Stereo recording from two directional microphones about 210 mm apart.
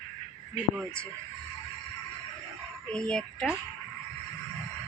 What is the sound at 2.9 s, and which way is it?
Speech, 5° left (ahead or behind).